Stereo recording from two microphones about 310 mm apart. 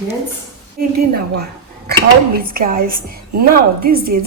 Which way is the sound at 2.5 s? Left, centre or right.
Right.